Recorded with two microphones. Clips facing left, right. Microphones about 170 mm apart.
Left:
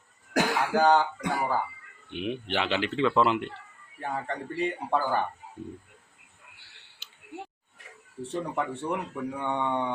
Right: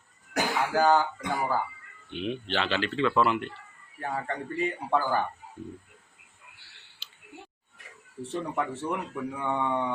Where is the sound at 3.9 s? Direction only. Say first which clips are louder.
Even; centre (ahead or behind).